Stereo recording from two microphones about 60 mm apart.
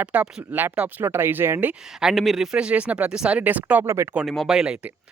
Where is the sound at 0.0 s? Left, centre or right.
Right.